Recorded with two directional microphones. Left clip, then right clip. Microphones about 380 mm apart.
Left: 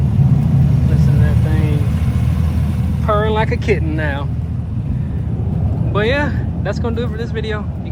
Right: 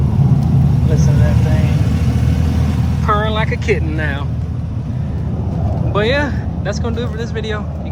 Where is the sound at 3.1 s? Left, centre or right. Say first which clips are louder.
Left 1 dB; centre.